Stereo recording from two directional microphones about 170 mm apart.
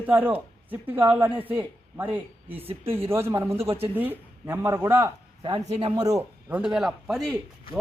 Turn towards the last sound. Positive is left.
turn(degrees=0)  # may be behind; listen again after turning